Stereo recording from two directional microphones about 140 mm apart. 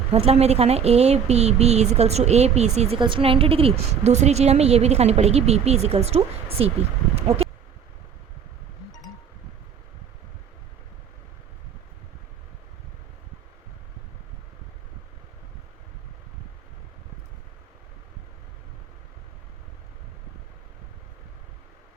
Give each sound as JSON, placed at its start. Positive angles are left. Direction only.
{"t": 0.1, "sound": "a woman's voice", "side_deg": -45}
{"t": 3.0, "sound": "a woman's voice", "side_deg": -40}